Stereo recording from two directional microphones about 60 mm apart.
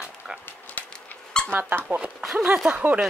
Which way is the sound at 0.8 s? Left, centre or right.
Left.